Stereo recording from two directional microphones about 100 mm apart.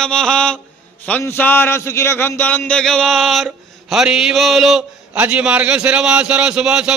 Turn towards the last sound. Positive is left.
turn(degrees=-10)  # may be behind; listen again after turning